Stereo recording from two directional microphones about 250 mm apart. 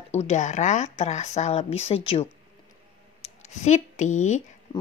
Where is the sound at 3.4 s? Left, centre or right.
Left.